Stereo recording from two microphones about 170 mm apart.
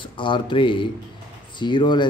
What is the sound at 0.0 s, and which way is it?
Speech, 30° left (ahead or behind).